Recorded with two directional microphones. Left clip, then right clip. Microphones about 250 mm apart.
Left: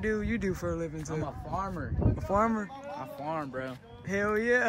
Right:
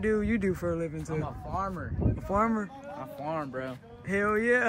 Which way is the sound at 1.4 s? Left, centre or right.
Left.